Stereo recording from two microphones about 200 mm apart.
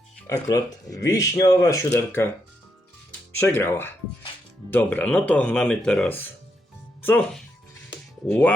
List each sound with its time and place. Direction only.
0.3 s speech: 20° left (ahead or behind)
3.3 s speech: 10° left (ahead or behind)